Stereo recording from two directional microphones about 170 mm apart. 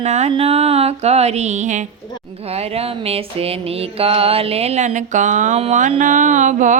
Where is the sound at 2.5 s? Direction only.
35° right (ahead or behind).